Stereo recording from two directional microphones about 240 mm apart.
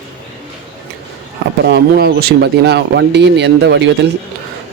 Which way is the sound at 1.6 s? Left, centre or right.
Right.